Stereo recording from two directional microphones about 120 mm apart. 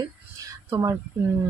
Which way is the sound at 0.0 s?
30° right (ahead or behind).